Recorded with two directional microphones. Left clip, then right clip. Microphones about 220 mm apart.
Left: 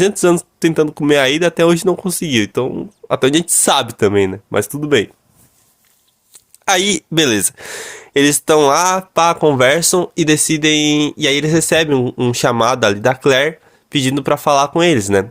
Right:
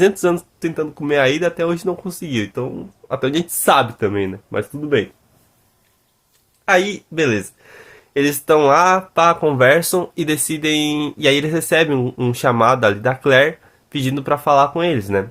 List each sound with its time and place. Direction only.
0.0 s speech: 30° left (ahead or behind)
6.7 s speech: 45° left (ahead or behind)